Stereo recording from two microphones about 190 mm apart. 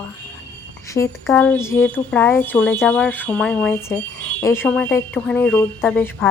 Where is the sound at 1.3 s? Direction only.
10° left (ahead or behind).